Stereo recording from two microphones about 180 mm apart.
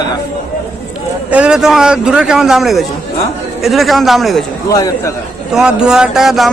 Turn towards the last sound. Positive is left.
turn(degrees=0)  # may be behind; listen again after turning